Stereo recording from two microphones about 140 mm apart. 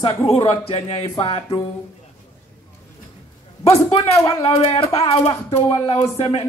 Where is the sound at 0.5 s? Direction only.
45° left (ahead or behind).